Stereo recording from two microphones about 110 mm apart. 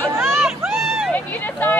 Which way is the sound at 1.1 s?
15° left (ahead or behind).